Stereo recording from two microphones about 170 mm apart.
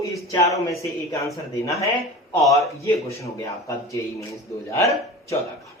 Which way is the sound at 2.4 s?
20° left (ahead or behind).